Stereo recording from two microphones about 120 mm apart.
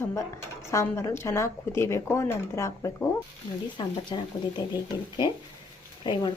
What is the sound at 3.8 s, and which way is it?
Speech, 40° left (ahead or behind).